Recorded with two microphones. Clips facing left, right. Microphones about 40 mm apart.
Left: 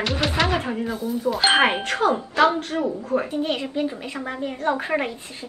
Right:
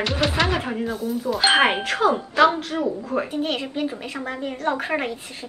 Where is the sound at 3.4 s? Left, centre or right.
Right.